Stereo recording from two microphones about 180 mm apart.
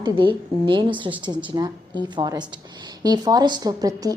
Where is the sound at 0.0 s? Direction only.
25° right (ahead or behind).